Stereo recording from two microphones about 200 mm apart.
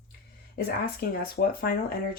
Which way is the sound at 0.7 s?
50° left (ahead or behind).